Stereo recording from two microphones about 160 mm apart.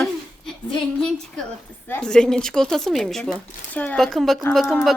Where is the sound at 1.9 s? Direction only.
5° left (ahead or behind).